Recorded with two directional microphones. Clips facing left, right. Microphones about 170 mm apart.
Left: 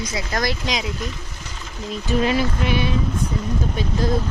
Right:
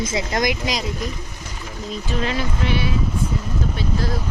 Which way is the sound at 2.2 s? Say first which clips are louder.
Left 2 dB; 15° left (ahead or behind).